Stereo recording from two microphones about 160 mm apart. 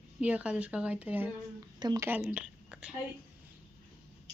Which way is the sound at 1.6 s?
25° right (ahead or behind).